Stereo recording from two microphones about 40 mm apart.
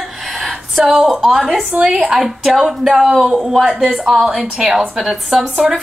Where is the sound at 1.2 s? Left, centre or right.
Centre.